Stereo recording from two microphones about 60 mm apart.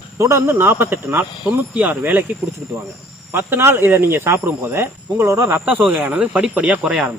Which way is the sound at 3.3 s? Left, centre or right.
Right.